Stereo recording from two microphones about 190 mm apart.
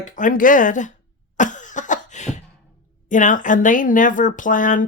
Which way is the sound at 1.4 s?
40° left (ahead or behind).